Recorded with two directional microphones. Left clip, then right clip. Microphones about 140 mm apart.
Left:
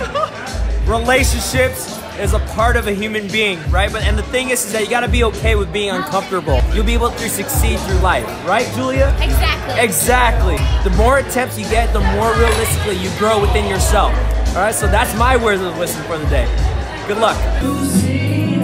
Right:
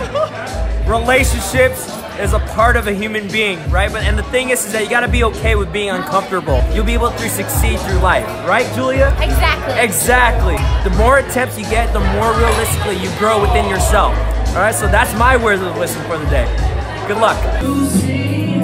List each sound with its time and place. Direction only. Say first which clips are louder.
0.8 s a man's voice: right 1 dB; 5° left (ahead or behind)
9.2 s speech: right 3 dB; 45° right (ahead or behind)
9.8 s a man's voice: right 1 dB; 5° left (ahead or behind)
17.1 s speech: right 2 dB; 10° right (ahead or behind)